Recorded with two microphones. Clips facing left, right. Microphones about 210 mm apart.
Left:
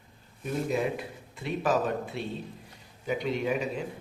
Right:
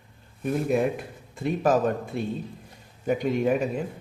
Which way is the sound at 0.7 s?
50° right (ahead or behind).